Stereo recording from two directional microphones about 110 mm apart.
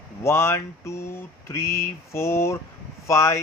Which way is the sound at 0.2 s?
25° left (ahead or behind).